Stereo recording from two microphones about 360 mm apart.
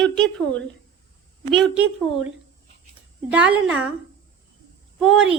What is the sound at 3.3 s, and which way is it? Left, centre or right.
Speech, centre.